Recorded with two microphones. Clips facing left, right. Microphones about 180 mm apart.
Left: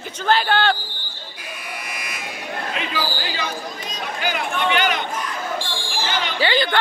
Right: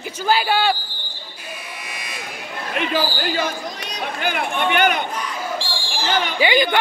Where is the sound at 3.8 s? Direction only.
60° right (ahead or behind).